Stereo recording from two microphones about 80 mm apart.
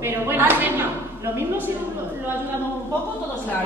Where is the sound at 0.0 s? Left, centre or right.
Right.